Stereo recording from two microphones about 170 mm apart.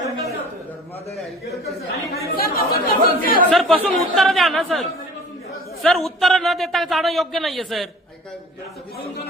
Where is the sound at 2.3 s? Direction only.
60° left (ahead or behind).